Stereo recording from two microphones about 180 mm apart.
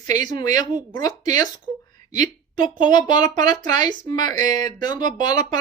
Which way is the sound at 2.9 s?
25° left (ahead or behind).